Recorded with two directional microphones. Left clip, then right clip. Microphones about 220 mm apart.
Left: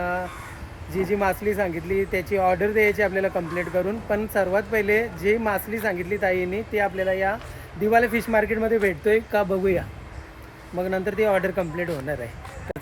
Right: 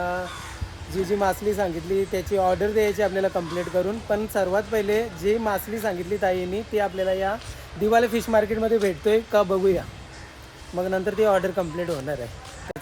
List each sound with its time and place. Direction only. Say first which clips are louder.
1.2 s speech: right 1 dB; 10° right (ahead or behind)